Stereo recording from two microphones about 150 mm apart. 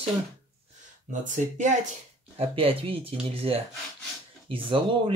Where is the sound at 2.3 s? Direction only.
40° right (ahead or behind).